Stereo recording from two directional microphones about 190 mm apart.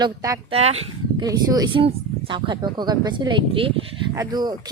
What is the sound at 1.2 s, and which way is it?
A woman's voice, 20° right (ahead or behind).